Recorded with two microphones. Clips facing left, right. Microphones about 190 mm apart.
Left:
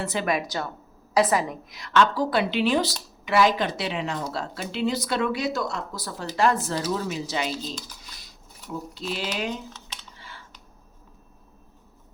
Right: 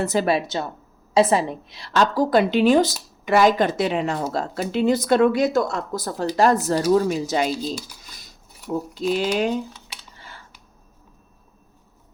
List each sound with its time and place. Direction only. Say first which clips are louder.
0.0 s a woman's voice: right 6 dB; 40° right (ahead or behind)
8.7 s speech: right 9 dB; 45° right (ahead or behind)
9.7 s a sound: even; 10° right (ahead or behind)
10.2 s computer keyboard: right 1 dB; 45° right (ahead or behind)